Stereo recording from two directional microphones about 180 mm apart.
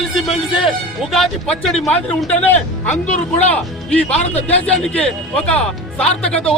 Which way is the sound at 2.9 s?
40° left (ahead or behind).